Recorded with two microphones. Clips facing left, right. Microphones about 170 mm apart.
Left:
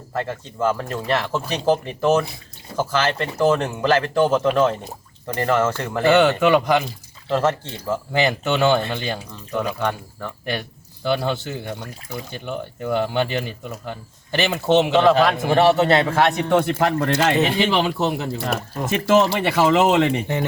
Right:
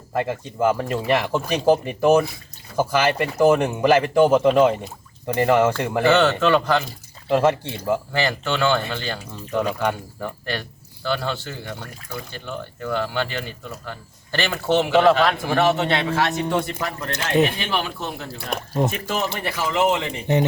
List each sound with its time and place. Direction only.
0.1 s speech: 15° right (ahead or behind)
6.1 s speech: 15° left (ahead or behind)
7.3 s speech: 10° right (ahead or behind)
8.1 s speech: 20° left (ahead or behind)
9.8 s speech: 15° right (ahead or behind)
10.4 s speech: 15° left (ahead or behind)
15.6 s a man's voice: 40° left (ahead or behind)
16.2 s speech: 60° left (ahead or behind); by 18.5 s 75° left (ahead or behind)
18.9 s speech: 90° left; by 20.2 s 70° left (ahead or behind)